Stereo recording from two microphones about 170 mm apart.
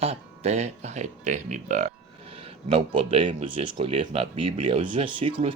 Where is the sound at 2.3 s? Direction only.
35° right (ahead or behind).